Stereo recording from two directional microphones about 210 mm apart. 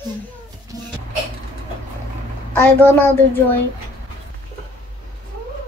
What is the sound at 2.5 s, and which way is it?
Speech, 10° left (ahead or behind).